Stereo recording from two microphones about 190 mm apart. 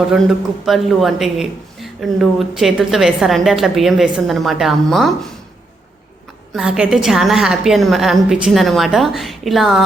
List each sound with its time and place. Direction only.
0.1 s speech: centre (ahead or behind)
6.5 s speech: 5° right (ahead or behind)